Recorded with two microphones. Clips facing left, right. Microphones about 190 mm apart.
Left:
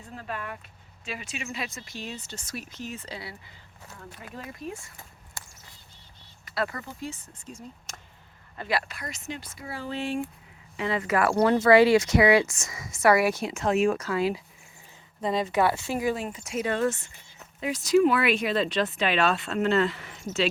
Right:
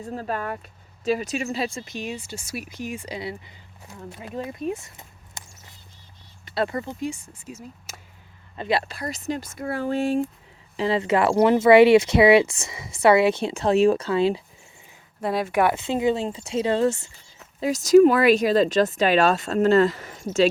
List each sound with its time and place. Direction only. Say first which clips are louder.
0.1 s speech: right 7 dB; 40° right (ahead or behind); by 5.4 s 20° right (ahead or behind)
6.4 s speech: right 5 dB; 25° right (ahead or behind); by 7.9 s 5° right (ahead or behind)
8.5 s speech: right 5 dB; 25° right (ahead or behind); by 10.2 s 40° right (ahead or behind)
10.8 s speech: right 5 dB; 30° right (ahead or behind)
15.2 s speech: right 3 dB; 10° right (ahead or behind); by 16.9 s 25° right (ahead or behind)
17.6 s speech: right 7 dB; 45° right (ahead or behind)